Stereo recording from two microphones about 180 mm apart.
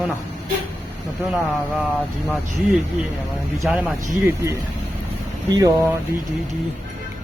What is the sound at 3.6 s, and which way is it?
Speech, centre (ahead or behind).